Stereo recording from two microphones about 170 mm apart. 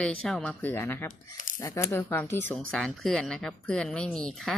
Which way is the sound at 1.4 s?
50° left (ahead or behind).